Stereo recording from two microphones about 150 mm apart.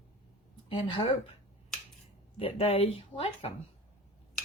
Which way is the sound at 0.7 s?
35° left (ahead or behind).